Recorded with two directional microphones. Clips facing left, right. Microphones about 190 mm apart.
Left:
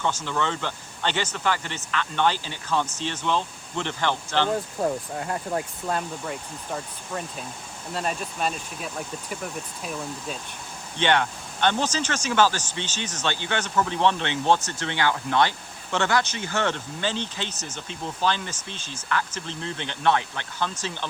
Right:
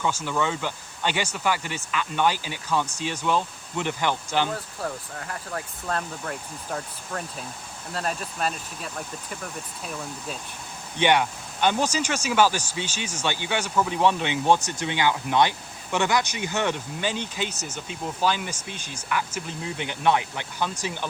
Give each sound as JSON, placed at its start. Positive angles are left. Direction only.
{"t": 0.1, "sound": "speech", "side_deg": -10}
{"t": 4.5, "sound": "speech", "side_deg": 20}
{"t": 5.9, "sound": "speech", "side_deg": 5}
{"t": 10.9, "sound": "speech", "side_deg": -10}